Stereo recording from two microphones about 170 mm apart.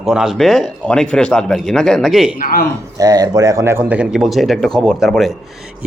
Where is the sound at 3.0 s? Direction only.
20° right (ahead or behind).